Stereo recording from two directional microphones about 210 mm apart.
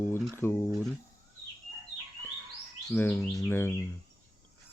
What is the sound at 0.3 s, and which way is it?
Speech, 10° left (ahead or behind).